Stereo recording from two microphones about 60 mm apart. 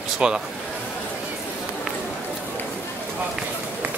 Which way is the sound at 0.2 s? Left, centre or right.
Centre.